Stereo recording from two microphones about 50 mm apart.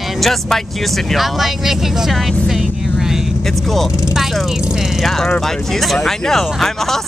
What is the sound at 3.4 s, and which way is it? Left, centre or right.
Vehicle, centre.